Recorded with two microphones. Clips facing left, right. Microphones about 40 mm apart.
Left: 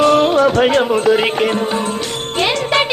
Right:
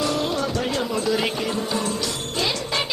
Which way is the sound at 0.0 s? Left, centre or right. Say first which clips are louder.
Left 12 dB; left.